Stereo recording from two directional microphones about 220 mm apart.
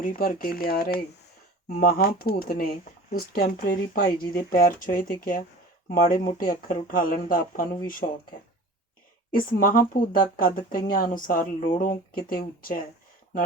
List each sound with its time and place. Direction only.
0.0 s speech: 40° left (ahead or behind)